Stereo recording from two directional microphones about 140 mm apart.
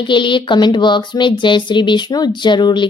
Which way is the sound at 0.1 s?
35° left (ahead or behind).